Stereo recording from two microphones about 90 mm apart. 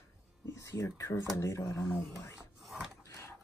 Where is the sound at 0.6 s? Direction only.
35° left (ahead or behind).